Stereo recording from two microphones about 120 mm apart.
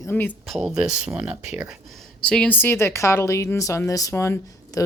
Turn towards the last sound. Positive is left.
turn(degrees=25)  # may be behind; listen again after turning